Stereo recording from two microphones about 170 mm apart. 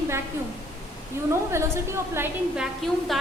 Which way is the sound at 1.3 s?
15° right (ahead or behind).